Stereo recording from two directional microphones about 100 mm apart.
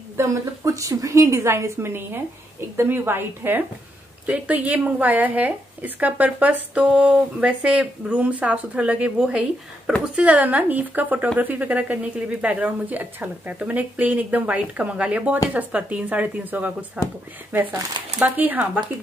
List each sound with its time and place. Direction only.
0.2 s a woman's voice: 30° right (ahead or behind); by 17.0 s 15° right (ahead or behind)
18.2 s speech: 15° right (ahead or behind)